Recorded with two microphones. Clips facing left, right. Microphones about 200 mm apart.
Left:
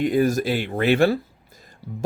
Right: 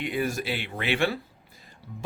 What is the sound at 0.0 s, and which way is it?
Speech, 40° left (ahead or behind).